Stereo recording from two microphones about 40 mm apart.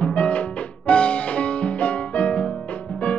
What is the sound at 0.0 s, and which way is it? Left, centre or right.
Music, left.